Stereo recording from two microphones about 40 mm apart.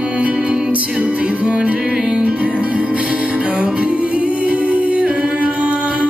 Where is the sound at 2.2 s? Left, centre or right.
Right.